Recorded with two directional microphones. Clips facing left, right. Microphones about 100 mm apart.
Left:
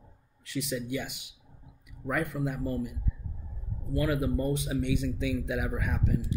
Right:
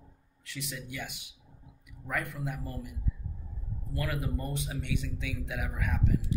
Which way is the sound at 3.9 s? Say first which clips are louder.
Left 7 dB; 20° left (ahead or behind).